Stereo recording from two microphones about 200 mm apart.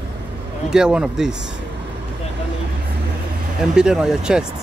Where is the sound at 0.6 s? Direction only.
5° right (ahead or behind).